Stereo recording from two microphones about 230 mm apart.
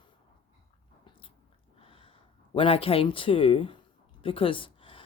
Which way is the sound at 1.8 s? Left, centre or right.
Left.